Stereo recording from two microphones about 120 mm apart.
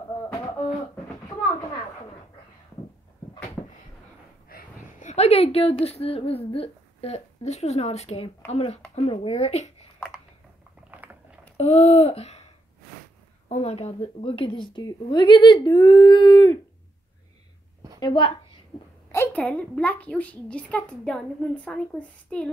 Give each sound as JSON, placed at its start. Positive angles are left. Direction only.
{"t": 4.7, "sound": "a woman's voice", "side_deg": 85}
{"t": 10.9, "sound": "biting", "side_deg": -15}
{"t": 11.5, "sound": "a sound", "side_deg": 60}
{"t": 13.5, "sound": "a woman's voice", "side_deg": 60}
{"t": 18.0, "sound": "speech", "side_deg": 40}
{"t": 18.7, "sound": "a sound", "side_deg": 40}
{"t": 19.1, "sound": "a child's voice", "side_deg": 15}